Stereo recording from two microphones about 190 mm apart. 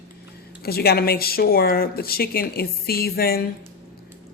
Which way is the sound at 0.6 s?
55° left (ahead or behind).